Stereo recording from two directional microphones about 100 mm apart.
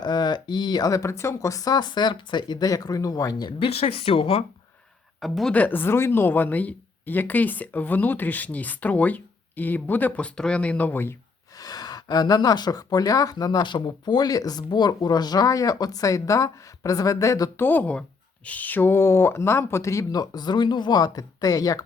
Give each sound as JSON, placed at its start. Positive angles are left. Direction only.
{"t": 0.0, "sound": "speech", "side_deg": 45}
{"t": 3.6, "sound": "speech", "side_deg": 80}
{"t": 5.2, "sound": "a woman's voice", "side_deg": 0}
{"t": 5.5, "sound": "speech", "side_deg": 20}
{"t": 11.5, "sound": "speech", "side_deg": 40}
{"t": 17.6, "sound": "speech", "side_deg": 20}